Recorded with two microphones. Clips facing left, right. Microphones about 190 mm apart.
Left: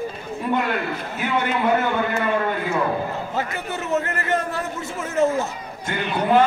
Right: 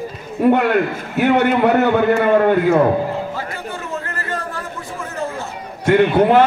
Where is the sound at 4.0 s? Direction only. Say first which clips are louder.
Left 3 dB; 20° left (ahead or behind).